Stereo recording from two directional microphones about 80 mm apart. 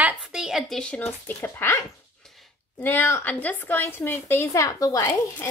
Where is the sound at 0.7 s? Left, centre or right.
Centre.